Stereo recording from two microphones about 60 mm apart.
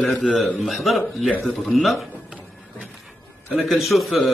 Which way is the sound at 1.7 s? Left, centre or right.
Centre.